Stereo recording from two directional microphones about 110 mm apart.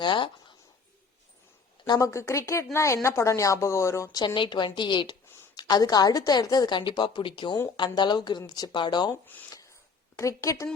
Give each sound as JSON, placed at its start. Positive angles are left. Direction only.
{"t": 0.0, "sound": "speech", "side_deg": 45}
{"t": 1.9, "sound": "a woman's voice", "side_deg": 30}
{"t": 4.4, "sound": "a woman's voice", "side_deg": 45}
{"t": 10.2, "sound": "a woman's voice", "side_deg": 30}